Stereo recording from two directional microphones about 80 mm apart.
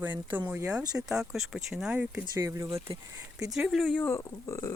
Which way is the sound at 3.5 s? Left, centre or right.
Centre.